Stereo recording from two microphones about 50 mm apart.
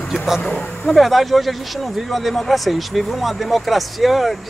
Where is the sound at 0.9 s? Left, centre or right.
Centre.